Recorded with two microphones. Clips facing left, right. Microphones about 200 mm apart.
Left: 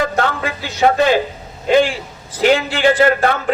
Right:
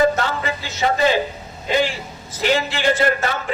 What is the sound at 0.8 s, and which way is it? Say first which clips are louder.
Speech: left 5 dB; 60° left (ahead or behind).